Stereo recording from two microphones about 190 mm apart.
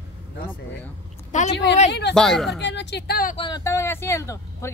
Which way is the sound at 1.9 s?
65° left (ahead or behind).